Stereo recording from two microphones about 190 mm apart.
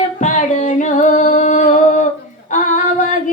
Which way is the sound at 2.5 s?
40° left (ahead or behind).